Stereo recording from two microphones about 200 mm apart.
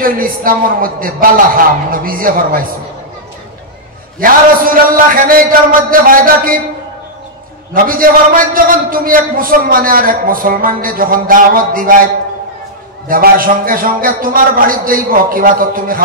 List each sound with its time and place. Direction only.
0.0 s a man's voice: 45° right (ahead or behind)
4.2 s a man's voice: 45° right (ahead or behind)
7.7 s a man's voice: 45° right (ahead or behind)
13.1 s a man's voice: 45° right (ahead or behind)